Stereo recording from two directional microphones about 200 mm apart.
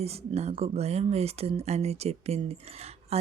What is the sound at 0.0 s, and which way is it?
Speech, 30° right (ahead or behind).